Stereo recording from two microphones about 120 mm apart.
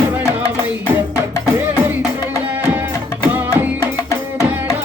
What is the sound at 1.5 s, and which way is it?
Music, 15° right (ahead or behind).